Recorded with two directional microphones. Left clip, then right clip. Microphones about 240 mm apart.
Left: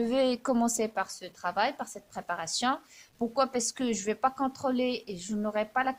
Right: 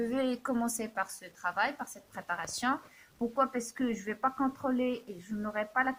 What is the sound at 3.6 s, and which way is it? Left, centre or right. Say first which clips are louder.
Speech: left 4 dB; left.